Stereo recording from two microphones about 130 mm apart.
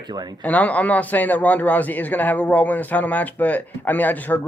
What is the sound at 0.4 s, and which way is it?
A man's voice, 10° left (ahead or behind).